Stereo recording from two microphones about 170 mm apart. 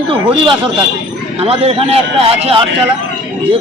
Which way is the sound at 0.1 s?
30° right (ahead or behind).